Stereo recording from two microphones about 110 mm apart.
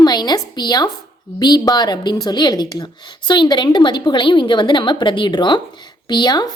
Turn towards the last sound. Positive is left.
turn(degrees=40)  # may be behind; listen again after turning